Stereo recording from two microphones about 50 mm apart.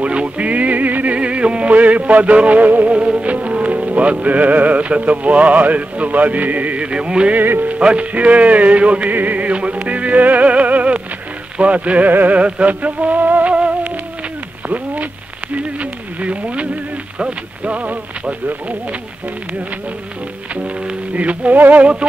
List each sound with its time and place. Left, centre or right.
0.0 s music: right
2.9 s music: right
7.3 s music: right
7.8 s speech: right
9.1 s music: right
11.5 s speech: right
12.1 s music: right
12.4 s music: right
15.5 s a sound: right
17.6 s speech: right
20.6 s speech: right